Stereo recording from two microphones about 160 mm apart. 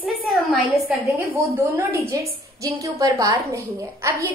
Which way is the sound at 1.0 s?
20° right (ahead or behind).